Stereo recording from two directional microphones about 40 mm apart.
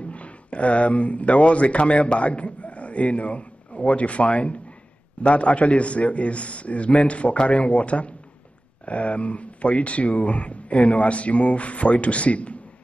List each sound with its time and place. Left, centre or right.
0.1 s speech: left